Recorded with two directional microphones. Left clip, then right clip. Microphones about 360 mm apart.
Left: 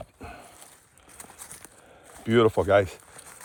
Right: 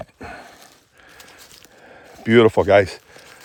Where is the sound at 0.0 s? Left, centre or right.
Right.